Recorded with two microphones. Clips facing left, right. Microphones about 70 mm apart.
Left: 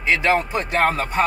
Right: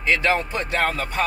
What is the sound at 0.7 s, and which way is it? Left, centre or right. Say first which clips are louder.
Speech: left 4 dB; left.